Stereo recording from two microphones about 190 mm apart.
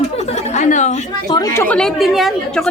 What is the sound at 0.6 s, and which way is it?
Speech, 40° left (ahead or behind).